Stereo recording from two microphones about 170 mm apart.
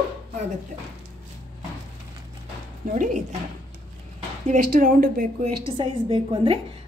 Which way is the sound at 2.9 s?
50° right (ahead or behind).